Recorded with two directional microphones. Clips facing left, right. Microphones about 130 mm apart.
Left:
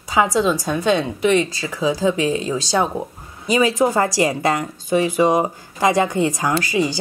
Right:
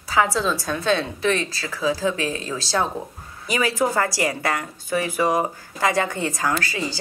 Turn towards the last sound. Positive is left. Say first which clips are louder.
# left 5 dB
turn(degrees=15)  # may be behind; listen again after turning